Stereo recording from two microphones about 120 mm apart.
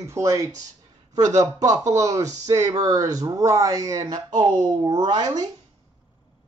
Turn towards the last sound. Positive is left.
turn(degrees=-35)  # may be behind; listen again after turning